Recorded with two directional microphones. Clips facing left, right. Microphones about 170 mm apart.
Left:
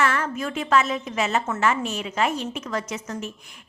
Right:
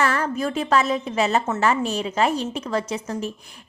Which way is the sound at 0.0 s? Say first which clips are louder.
Right 2 dB; 35° right (ahead or behind).